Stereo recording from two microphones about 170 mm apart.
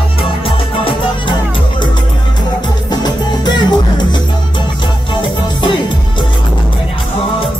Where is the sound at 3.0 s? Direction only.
25° left (ahead or behind).